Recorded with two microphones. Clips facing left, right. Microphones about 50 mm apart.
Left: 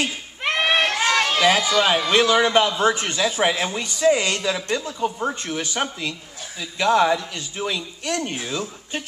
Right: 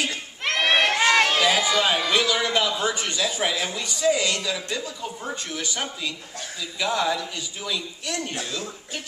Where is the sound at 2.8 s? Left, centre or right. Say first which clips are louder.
Left 5 dB; left.